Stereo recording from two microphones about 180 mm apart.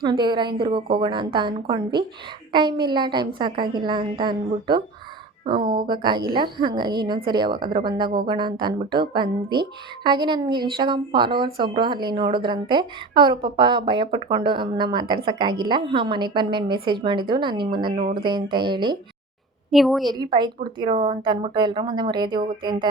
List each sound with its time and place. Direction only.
0.0 s speech: 25° right (ahead or behind)
19.7 s a woman's voice: centre (ahead or behind)
20.1 s speech: 25° right (ahead or behind)